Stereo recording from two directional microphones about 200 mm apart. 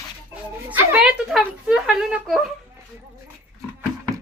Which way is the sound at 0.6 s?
10° right (ahead or behind).